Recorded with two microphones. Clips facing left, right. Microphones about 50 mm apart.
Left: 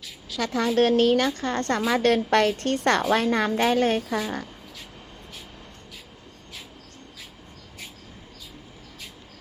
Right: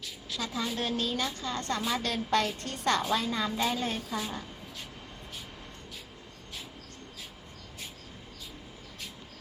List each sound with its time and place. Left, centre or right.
0.3 s a woman's voice: left